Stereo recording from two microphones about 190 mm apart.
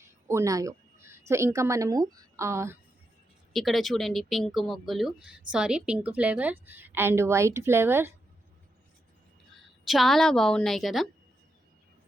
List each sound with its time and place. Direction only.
0.0 s a woman's voice: 15° right (ahead or behind)
3.5 s speech: centre (ahead or behind)
9.8 s speech: centre (ahead or behind)